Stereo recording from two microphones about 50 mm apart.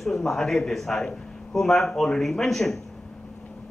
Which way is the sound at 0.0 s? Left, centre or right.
Centre.